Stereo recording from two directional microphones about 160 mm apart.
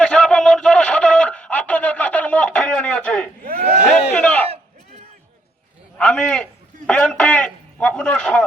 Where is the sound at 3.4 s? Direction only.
70° right (ahead or behind).